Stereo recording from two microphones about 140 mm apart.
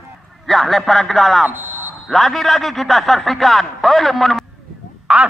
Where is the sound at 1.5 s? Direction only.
15° right (ahead or behind).